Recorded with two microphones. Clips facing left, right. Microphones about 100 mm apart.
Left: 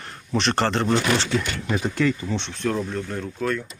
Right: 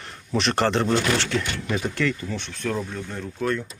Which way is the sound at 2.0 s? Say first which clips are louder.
Left 3 dB; 15° left (ahead or behind).